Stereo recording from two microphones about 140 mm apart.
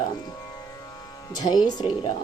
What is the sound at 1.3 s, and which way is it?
Music, 30° left (ahead or behind).